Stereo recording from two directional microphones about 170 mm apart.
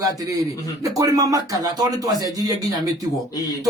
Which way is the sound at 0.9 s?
20° right (ahead or behind).